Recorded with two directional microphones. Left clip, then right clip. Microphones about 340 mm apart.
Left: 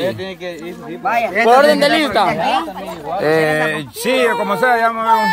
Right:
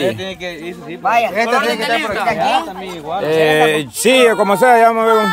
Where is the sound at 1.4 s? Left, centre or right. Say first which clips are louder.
Left 5 dB; centre.